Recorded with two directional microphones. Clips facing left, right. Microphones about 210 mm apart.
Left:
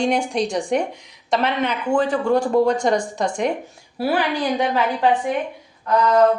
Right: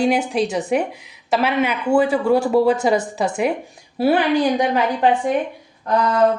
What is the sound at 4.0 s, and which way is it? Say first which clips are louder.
Speech: right 5 dB; 20° right (ahead or behind).